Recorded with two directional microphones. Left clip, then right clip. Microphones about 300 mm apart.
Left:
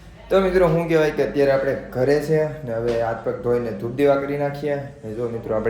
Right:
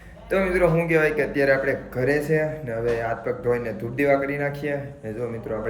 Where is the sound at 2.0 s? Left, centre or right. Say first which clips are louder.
Left 3 dB; centre.